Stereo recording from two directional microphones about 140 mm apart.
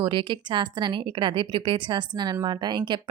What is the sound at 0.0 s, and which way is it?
A woman's voice, 35° right (ahead or behind).